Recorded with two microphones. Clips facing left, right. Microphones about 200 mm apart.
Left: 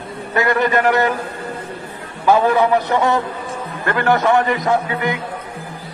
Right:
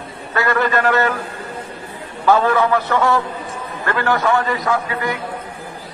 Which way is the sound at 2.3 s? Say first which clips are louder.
Left 1 dB; 15° left (ahead or behind).